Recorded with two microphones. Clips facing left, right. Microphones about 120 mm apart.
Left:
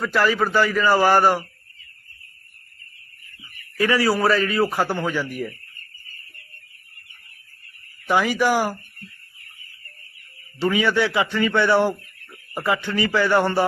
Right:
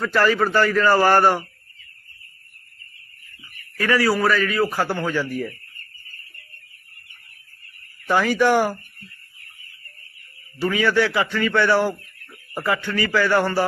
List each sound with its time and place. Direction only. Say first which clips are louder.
0.0 s a man's voice: right 1 dB; 10° left (ahead or behind)
3.8 s a man's voice: even; 25° left (ahead or behind)
8.0 s a man's voice: right 1 dB; 15° left (ahead or behind)
10.6 s speech: even; 25° left (ahead or behind)